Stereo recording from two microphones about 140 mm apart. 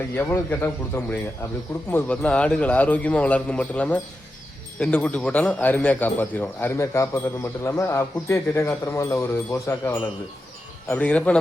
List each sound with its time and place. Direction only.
0.2 s speech: 15° left (ahead or behind)